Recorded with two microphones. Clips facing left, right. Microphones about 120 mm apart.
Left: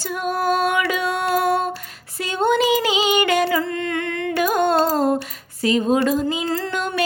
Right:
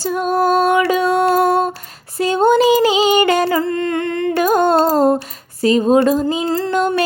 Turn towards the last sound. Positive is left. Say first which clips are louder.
# right 7 dB
turn(degrees=-40)  # may be behind; listen again after turning